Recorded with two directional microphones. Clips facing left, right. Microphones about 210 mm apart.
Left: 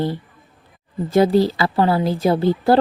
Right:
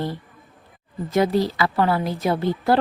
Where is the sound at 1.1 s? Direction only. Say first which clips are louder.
Left 5 dB; 30° left (ahead or behind).